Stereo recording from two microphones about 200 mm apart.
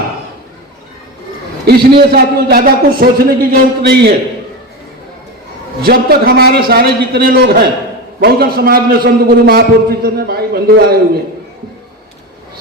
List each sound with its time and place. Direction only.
1.6 s a man's voice: 55° right (ahead or behind)
5.8 s a man's voice: 50° right (ahead or behind)